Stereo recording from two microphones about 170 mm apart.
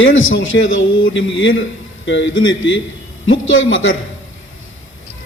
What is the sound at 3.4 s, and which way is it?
Speech, 90° left.